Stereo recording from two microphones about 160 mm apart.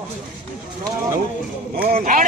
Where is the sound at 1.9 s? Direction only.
60° right (ahead or behind).